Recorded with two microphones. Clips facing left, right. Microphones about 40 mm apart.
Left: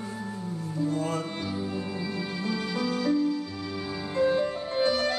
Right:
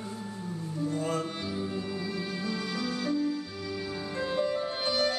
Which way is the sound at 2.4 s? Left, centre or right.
Left.